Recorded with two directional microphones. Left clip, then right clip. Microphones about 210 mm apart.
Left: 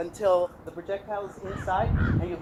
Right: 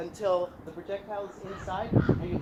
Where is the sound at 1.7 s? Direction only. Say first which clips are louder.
Left 7 dB; 25° left (ahead or behind).